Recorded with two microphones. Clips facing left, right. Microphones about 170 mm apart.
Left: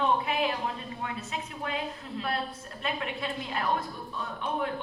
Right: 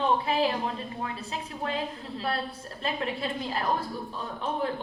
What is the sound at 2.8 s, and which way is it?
A woman's voice, 35° right (ahead or behind).